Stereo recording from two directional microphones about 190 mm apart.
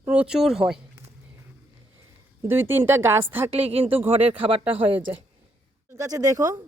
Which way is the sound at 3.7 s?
30° right (ahead or behind).